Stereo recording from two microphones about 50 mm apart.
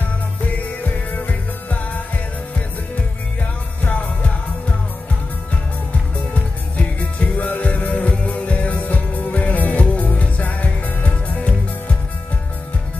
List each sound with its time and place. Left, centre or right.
0.8 s music: left
3.8 s music: left
6.3 s music: left